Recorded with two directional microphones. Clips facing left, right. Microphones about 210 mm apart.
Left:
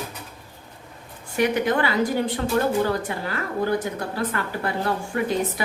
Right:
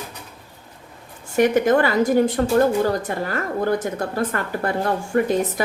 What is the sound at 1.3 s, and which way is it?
A woman's voice, 45° right (ahead or behind).